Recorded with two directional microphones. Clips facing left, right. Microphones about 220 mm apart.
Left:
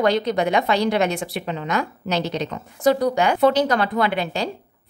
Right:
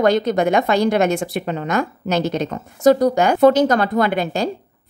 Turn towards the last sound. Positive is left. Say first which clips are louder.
# right 4 dB
turn(degrees=-45)  # may be behind; listen again after turning